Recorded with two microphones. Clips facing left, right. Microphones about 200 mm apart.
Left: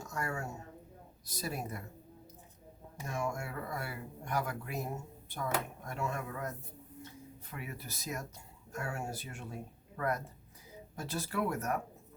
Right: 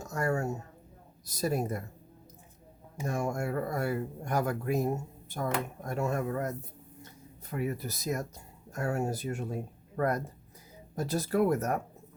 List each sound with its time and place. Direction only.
0.1 s a sound: 45° right (ahead or behind)
1.2 s speech: 45° right (ahead or behind)
3.0 s speech: 45° right (ahead or behind)
7.5 s speech: 40° right (ahead or behind)